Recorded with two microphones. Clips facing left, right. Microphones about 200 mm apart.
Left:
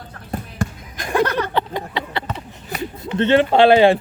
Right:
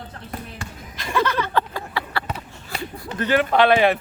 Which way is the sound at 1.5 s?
20° left (ahead or behind).